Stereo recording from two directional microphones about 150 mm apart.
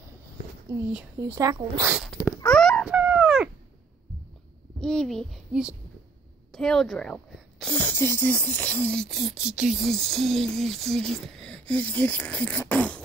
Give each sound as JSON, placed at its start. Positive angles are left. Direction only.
{"t": 0.7, "sound": "speech", "side_deg": -20}
{"t": 2.2, "sound": "a sound", "side_deg": 10}
{"t": 2.9, "sound": "dog", "side_deg": -10}
{"t": 4.7, "sound": "speech", "side_deg": 5}